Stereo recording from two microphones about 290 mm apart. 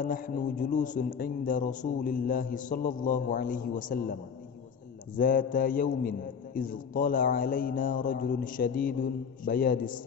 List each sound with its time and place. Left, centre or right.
0.0 s a man's voice: left